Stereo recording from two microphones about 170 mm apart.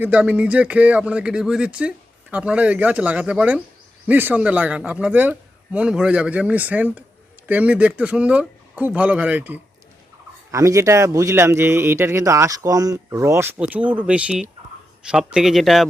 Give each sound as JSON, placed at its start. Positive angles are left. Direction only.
{"t": 0.0, "sound": "speech", "side_deg": -10}